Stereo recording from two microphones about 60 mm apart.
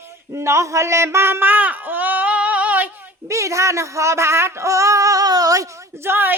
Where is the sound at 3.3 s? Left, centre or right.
Right.